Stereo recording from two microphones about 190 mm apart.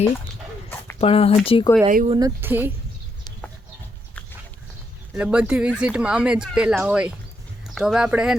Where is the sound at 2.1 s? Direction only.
20° right (ahead or behind).